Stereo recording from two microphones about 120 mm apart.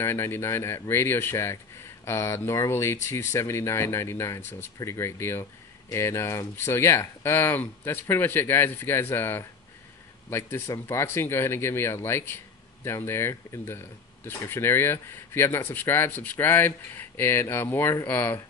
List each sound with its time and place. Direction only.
0.0 s speech: 20° left (ahead or behind)
10.7 s speech: 20° left (ahead or behind)